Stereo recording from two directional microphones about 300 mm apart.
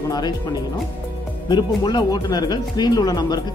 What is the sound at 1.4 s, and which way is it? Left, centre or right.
Speech, centre.